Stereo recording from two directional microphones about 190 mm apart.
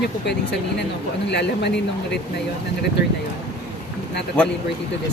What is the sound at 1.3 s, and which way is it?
Speech, 65° left (ahead or behind).